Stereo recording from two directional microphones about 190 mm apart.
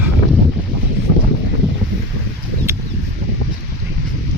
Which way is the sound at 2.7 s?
15° right (ahead or behind).